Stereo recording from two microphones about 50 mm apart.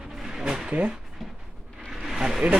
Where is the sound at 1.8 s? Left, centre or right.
Centre.